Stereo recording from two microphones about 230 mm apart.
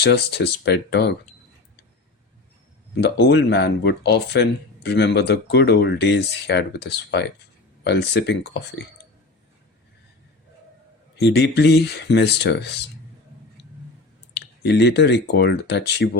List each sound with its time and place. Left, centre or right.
0.0 s speech: left
2.9 s speech: left
11.2 s speech: left
14.3 s speech: left